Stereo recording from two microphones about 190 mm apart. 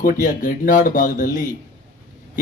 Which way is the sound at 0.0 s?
45° left (ahead or behind).